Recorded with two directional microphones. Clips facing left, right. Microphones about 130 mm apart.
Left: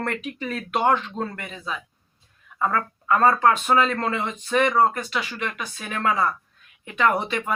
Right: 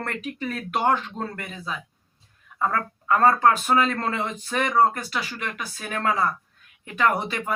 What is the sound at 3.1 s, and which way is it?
Speech, 40° right (ahead or behind).